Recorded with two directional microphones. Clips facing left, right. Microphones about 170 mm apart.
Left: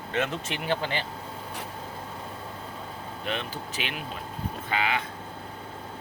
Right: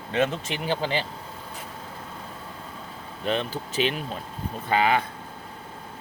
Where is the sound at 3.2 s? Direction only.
35° right (ahead or behind).